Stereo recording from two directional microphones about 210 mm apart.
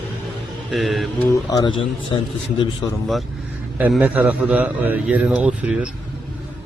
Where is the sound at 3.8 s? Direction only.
5° right (ahead or behind).